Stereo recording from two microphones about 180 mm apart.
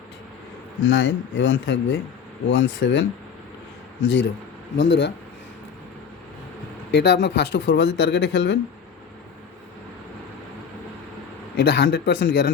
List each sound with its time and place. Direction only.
0.9 s speech: 90° left
4.0 s speech: 90° left
6.9 s speech: 70° left (ahead or behind)
11.5 s speech: 70° left (ahead or behind)